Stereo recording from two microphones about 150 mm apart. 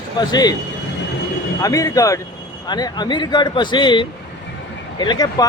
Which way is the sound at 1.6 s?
25° left (ahead or behind).